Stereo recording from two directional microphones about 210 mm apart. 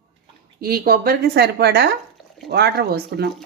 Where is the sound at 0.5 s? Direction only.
45° right (ahead or behind).